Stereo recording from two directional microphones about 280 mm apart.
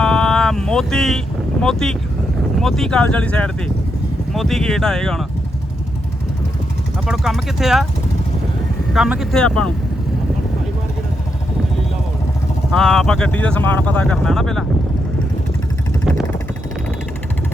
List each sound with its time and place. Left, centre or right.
0.0 s vehicle: centre
1.6 s speech: centre
7.1 s speech: centre
8.9 s speech: centre
12.7 s speech: centre